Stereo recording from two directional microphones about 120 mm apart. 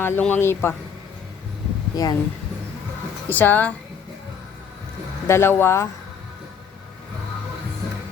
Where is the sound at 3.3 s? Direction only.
15° left (ahead or behind).